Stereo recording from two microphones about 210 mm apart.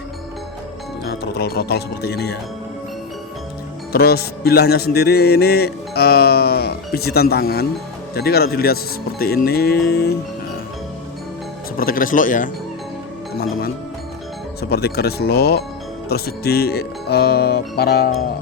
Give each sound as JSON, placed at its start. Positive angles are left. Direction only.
{"t": 1.0, "sound": "a man's voice", "side_deg": 50}
{"t": 3.9, "sound": "a man's voice", "side_deg": 50}
{"t": 11.8, "sound": "speech", "side_deg": 40}
{"t": 14.6, "sound": "a man's voice", "side_deg": 50}